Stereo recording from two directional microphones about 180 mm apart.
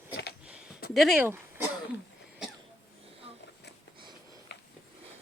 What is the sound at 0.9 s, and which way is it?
Speech, centre (ahead or behind).